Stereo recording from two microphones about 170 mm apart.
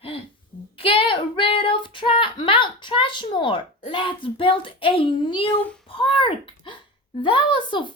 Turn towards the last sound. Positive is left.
turn(degrees=30)  # may be behind; listen again after turning